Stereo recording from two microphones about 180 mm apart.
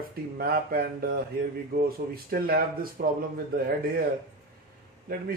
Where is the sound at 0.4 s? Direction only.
55° right (ahead or behind).